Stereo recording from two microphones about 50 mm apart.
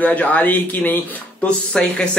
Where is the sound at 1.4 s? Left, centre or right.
Left.